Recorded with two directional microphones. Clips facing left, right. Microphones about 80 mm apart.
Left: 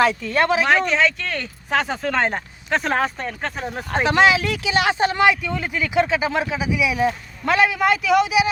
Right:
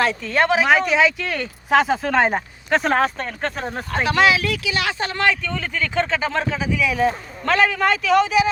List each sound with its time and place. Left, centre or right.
0.3 s speech: right
0.7 s speech: centre
3.9 s speech: left; by 8.4 s centre